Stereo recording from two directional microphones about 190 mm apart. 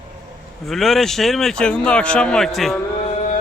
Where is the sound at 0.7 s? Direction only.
Centre (ahead or behind).